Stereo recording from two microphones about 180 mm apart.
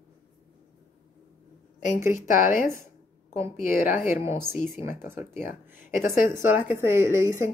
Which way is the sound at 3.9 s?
15° right (ahead or behind).